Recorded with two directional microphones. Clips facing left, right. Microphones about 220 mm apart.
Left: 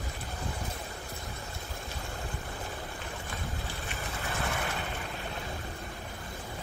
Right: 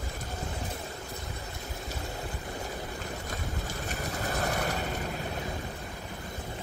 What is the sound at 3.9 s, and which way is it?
Vehicle, 40° right (ahead or behind).